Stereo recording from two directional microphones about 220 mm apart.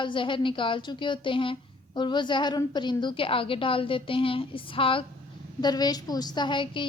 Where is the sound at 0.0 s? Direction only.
20° left (ahead or behind).